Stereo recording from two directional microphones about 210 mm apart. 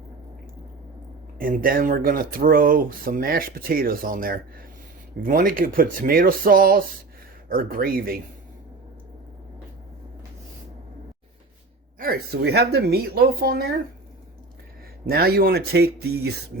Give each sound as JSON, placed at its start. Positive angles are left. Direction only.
{"t": 1.4, "sound": "speech", "side_deg": -40}
{"t": 11.9, "sound": "speech", "side_deg": -45}
{"t": 15.0, "sound": "speech", "side_deg": -50}